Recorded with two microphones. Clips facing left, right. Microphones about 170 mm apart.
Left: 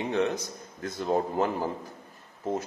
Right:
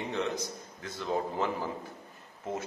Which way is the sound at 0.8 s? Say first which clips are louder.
Left 5 dB; 45° left (ahead or behind).